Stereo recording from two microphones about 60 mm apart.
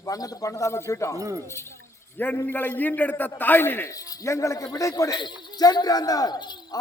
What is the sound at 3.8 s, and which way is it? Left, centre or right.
Speech, left.